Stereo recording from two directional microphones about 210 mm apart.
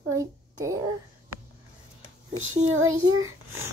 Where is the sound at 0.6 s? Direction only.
15° right (ahead or behind).